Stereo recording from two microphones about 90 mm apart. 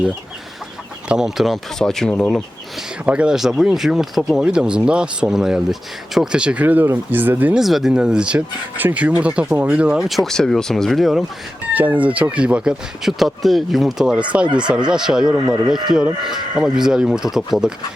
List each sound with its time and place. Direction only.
1.0 s speech: 5° right (ahead or behind)
1.8 s speech: 5° left (ahead or behind)
3.1 s speech: 10° right (ahead or behind)
7.5 s speech: 5° right (ahead or behind)
11.7 s speech: 20° right (ahead or behind)